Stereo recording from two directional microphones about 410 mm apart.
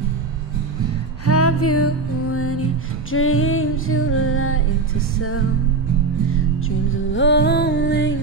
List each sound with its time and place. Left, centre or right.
1.2 s music: left
6.9 s music: left